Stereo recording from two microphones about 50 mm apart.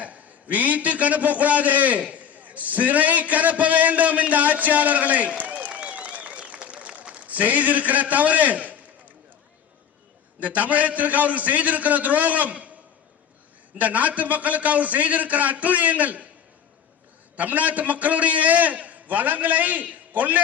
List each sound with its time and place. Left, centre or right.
0.0 s a man's voice: right
5.6 s applause: right
10.4 s a man's voice: right
13.7 s a man's voice: right
17.3 s a man's voice: right